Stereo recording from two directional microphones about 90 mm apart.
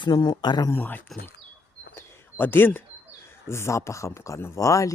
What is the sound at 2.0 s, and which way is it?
Bird, 25° left (ahead or behind).